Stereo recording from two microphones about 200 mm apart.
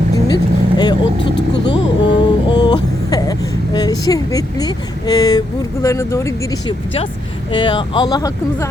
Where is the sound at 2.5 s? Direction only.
20° left (ahead or behind).